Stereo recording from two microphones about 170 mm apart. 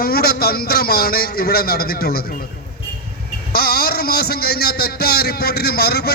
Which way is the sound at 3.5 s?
65° left (ahead or behind).